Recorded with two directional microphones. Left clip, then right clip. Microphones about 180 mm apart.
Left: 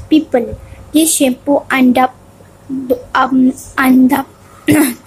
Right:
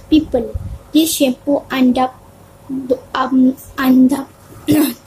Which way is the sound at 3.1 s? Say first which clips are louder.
Left 7 dB; 15° left (ahead or behind).